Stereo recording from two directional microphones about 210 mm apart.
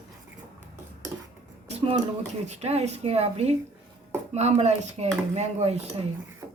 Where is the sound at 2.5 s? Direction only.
30° right (ahead or behind).